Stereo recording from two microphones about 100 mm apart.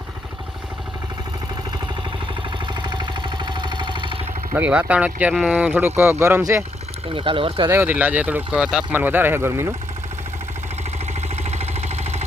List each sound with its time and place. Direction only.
2.8 s jackhammer: 50° right (ahead or behind)
4.5 s speech: 15° right (ahead or behind)
7.1 s speech: 60° right (ahead or behind)
7.7 s speech: 20° right (ahead or behind)
11.4 s vehicle: 90° right